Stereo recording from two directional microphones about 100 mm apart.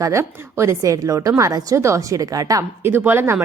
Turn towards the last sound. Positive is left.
turn(degrees=-20)  # may be behind; listen again after turning